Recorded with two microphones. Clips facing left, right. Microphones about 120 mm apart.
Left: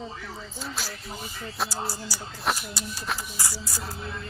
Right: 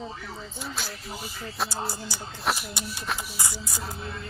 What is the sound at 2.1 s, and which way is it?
Music, 20° right (ahead or behind).